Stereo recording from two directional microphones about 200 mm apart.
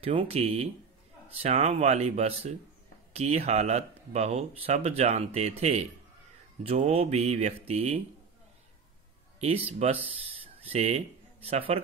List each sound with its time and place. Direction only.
0.0 s speech: 25° right (ahead or behind)
9.4 s speech: 30° right (ahead or behind)